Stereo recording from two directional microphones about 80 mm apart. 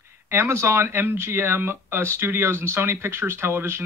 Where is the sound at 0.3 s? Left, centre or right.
Right.